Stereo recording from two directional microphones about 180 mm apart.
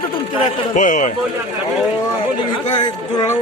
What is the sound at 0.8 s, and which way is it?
Speech, 45° left (ahead or behind).